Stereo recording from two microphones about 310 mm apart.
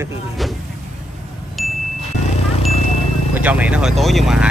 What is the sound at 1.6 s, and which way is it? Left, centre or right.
Chime, centre.